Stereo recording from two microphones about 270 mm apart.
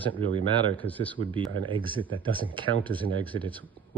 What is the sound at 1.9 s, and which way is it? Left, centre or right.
Speech, centre.